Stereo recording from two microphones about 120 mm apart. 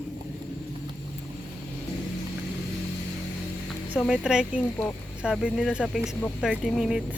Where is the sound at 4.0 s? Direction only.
5° right (ahead or behind).